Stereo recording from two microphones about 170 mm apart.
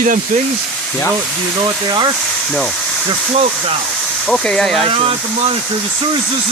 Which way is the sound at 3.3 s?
35° right (ahead or behind).